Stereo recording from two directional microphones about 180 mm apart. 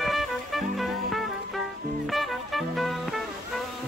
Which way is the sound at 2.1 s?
Centre (ahead or behind).